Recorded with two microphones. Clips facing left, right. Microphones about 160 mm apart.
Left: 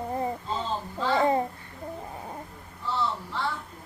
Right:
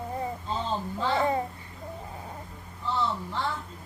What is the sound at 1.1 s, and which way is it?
Babbling, 30° left (ahead or behind).